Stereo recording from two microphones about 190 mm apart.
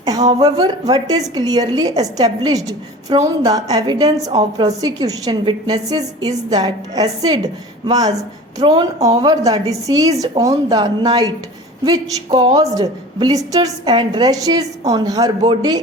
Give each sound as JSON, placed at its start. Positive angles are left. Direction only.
{"t": 0.3, "sound": "a woman's voice", "side_deg": -20}